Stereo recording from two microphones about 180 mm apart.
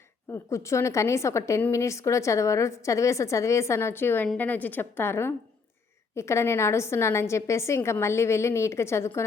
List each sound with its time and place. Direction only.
0.5 s a woman's voice: 15° left (ahead or behind)